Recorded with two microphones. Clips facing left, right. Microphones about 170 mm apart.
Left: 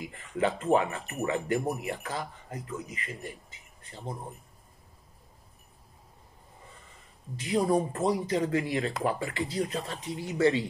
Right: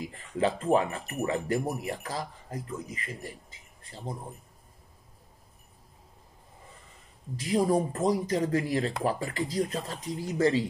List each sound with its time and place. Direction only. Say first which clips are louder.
0.0 s speech: right 1 dB; 30° right (ahead or behind)
7.3 s speech: right 1 dB; 35° right (ahead or behind)